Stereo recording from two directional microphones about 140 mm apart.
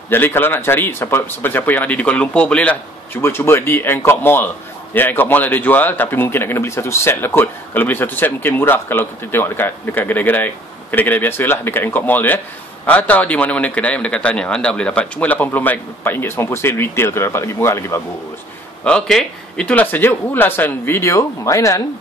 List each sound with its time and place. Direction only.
0.1 s speech: 15° left (ahead or behind)
18.9 s speech: 5° left (ahead or behind); by 21.8 s 25° left (ahead or behind)